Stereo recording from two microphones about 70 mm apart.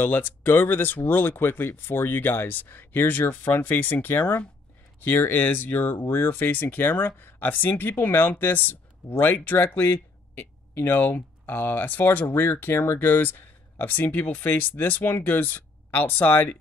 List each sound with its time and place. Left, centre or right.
0.0 s speech: left